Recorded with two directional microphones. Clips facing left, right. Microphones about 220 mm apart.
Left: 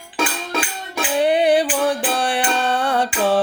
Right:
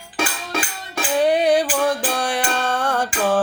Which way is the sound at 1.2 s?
10° left (ahead or behind).